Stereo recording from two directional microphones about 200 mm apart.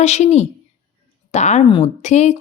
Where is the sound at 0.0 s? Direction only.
35° left (ahead or behind).